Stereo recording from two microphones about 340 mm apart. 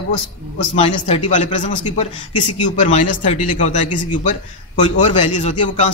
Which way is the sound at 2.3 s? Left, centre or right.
Left.